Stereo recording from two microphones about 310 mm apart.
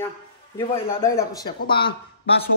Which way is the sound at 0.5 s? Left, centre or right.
Centre.